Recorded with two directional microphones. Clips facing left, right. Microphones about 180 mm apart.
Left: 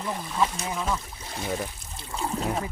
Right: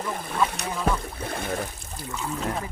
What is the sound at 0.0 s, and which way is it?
Speech, 50° right (ahead or behind).